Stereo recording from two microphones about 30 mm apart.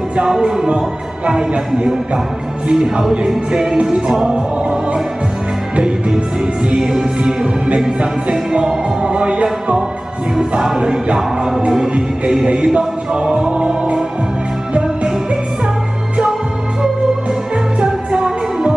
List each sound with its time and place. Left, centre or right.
0.3 s music: right
2.7 s music: right
5.8 s music: right
6.8 s music: centre
8.0 s music: right
12.7 s music: right
17.8 s music: right